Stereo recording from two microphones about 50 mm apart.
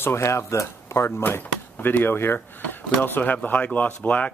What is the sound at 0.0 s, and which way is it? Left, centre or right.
Speech, left.